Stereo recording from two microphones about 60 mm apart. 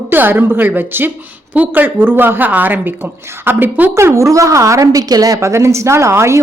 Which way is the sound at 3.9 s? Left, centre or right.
Right.